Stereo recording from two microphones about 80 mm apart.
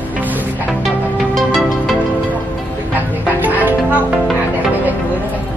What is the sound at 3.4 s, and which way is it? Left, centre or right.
Music, right.